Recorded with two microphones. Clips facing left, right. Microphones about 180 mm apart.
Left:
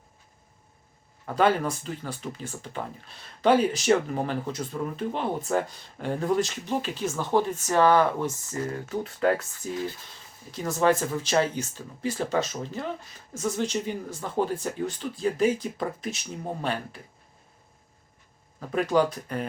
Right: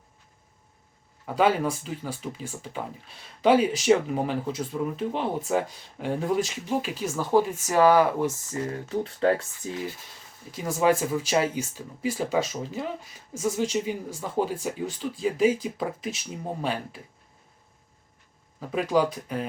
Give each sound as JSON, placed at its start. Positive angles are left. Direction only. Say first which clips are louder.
{"t": 1.2, "sound": "speech", "louder": "even", "side_deg": -5}
{"t": 9.0, "sound": "speech", "louder": "even", "side_deg": -30}
{"t": 10.5, "sound": "speech", "louder": "even", "side_deg": -10}
{"t": 18.6, "sound": "speech", "louder": "even", "side_deg": -5}